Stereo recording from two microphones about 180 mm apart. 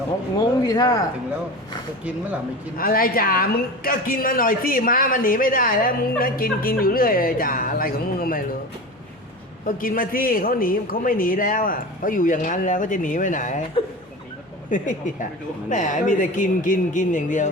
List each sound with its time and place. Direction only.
0.3 s speech: 20° left (ahead or behind)
2.7 s speech: 55° left (ahead or behind)
9.6 s speech: 50° left (ahead or behind)
14.7 s speech: 45° left (ahead or behind)